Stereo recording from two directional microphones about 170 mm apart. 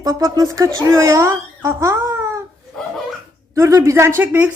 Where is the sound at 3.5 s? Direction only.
20° right (ahead or behind).